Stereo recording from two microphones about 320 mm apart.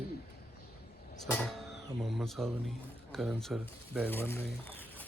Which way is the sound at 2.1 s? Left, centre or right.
Centre.